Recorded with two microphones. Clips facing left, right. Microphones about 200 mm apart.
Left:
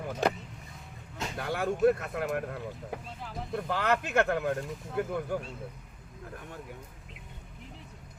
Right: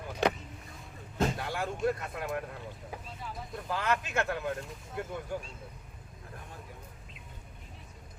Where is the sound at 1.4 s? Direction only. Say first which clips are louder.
Left 6 dB; 60° left (ahead or behind).